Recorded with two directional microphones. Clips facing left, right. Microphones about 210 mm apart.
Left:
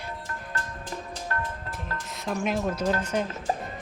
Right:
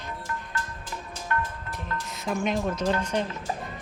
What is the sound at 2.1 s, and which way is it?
Music, centre (ahead or behind).